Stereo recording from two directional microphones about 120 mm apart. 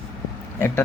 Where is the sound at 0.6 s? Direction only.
20° left (ahead or behind).